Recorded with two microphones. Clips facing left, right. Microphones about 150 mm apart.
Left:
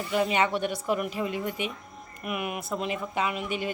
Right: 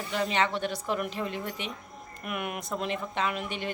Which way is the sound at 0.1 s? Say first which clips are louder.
Left 3 dB; 10° left (ahead or behind).